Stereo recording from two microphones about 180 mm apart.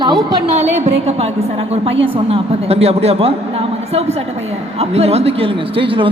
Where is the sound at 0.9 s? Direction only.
35° right (ahead or behind).